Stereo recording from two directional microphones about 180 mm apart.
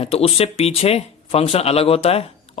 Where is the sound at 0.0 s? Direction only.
35° left (ahead or behind).